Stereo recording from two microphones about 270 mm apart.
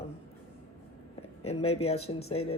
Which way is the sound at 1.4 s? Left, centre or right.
Left.